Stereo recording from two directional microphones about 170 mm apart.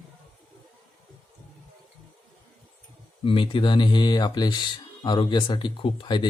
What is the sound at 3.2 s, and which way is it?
Speech, 30° left (ahead or behind).